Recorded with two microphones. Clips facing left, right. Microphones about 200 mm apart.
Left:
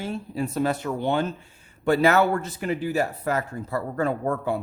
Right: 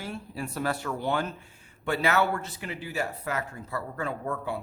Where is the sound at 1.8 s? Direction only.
40° left (ahead or behind).